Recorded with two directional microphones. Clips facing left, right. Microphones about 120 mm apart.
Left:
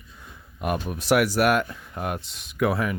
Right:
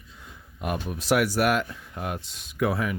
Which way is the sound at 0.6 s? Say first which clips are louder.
Left 3 dB; 55° left (ahead or behind).